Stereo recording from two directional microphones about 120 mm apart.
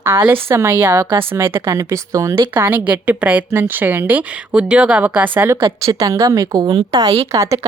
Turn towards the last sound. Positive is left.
turn(degrees=-25)  # may be behind; listen again after turning